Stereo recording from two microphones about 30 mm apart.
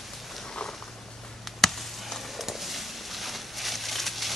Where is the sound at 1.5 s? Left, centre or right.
Centre.